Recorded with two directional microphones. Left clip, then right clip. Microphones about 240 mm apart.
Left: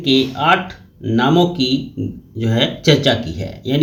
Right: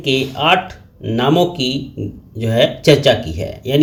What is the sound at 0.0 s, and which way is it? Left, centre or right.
Speech, centre.